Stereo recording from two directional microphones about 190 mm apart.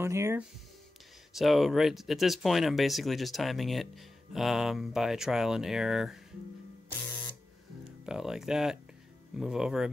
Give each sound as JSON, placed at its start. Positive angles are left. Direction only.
{"t": 0.0, "sound": "speech", "side_deg": -15}
{"t": 1.3, "sound": "speech", "side_deg": 0}
{"t": 8.0, "sound": "speech", "side_deg": -5}